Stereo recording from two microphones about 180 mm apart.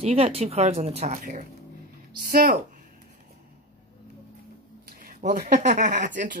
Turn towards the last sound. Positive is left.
turn(degrees=-45)  # may be behind; listen again after turning